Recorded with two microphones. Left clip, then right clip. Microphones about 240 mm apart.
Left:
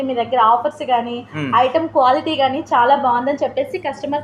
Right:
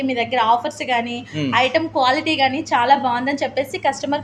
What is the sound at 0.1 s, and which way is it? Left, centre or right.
A woman's voice, right.